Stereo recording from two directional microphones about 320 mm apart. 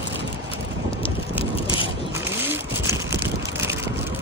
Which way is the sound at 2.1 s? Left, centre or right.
Centre.